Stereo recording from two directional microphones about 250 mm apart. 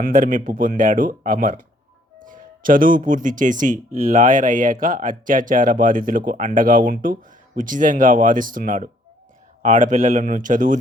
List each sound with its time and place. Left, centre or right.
0.0 s speech: right